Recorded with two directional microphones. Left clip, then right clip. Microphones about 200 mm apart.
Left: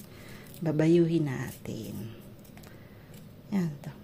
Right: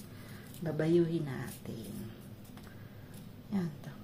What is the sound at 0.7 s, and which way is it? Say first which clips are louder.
Speech: left 6 dB; 50° left (ahead or behind).